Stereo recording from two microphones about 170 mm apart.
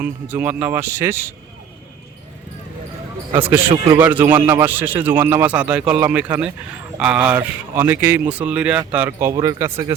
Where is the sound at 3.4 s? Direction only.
15° right (ahead or behind).